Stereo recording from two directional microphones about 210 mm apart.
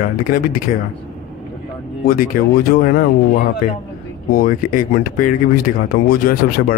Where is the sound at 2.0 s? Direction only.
40° left (ahead or behind).